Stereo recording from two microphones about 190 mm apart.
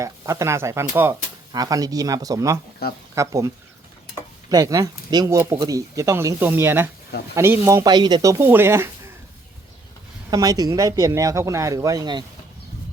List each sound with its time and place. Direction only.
0.0 s speech: 15° right (ahead or behind)
2.8 s speech: 55° left (ahead or behind)
3.2 s speech: 15° right (ahead or behind)
10.2 s speech: 20° right (ahead or behind)